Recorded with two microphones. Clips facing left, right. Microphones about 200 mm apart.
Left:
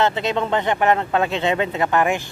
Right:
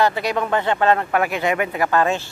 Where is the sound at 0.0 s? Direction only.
25° left (ahead or behind).